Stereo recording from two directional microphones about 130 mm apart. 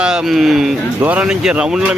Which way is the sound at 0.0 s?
5° right (ahead or behind).